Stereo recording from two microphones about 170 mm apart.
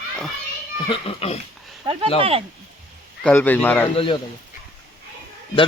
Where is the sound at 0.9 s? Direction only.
35° left (ahead or behind).